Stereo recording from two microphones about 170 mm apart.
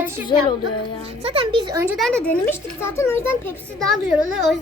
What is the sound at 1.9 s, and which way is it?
Speech, centre (ahead or behind).